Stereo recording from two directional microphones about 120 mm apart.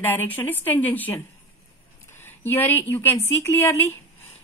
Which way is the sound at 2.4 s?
15° left (ahead or behind).